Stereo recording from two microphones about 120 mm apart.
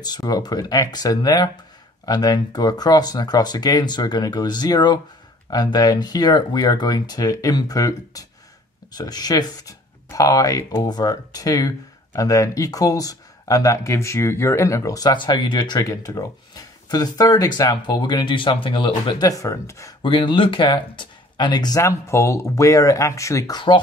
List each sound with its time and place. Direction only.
0.0 s speech: 35° left (ahead or behind)
20.0 s speech: 45° left (ahead or behind); by 23.6 s 25° left (ahead or behind)